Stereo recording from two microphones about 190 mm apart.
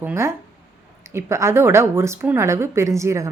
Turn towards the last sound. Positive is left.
turn(degrees=-15)  # may be behind; listen again after turning